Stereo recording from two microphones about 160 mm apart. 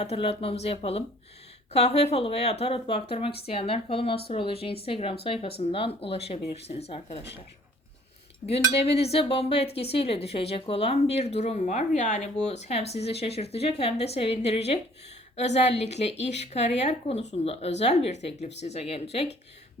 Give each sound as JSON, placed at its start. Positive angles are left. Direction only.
{"t": 0.0, "sound": "speech", "side_deg": 35}
{"t": 8.4, "sound": "speech", "side_deg": 40}